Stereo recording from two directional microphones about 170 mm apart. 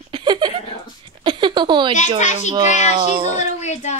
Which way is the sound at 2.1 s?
45° left (ahead or behind).